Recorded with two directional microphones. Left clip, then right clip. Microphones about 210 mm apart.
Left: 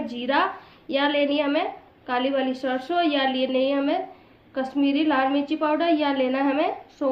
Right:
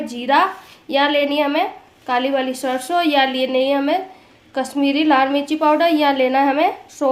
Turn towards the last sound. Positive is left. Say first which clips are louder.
# right 7 dB
turn(degrees=-55)  # may be behind; listen again after turning